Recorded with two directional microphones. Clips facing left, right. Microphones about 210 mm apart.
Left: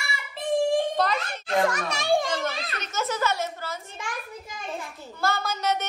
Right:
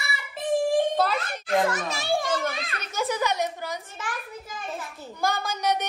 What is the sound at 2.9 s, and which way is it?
Speech, 15° right (ahead or behind).